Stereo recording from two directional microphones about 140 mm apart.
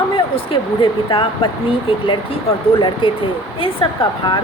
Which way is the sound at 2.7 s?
40° left (ahead or behind).